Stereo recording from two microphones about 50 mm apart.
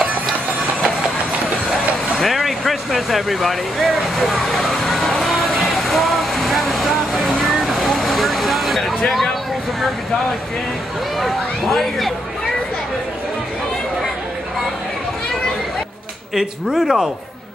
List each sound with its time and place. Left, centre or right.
1.7 s vehicle: centre
11.1 s speech: centre
16.3 s speech: centre